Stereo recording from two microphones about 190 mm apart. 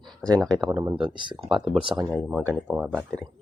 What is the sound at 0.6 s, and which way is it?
Speech, 20° right (ahead or behind).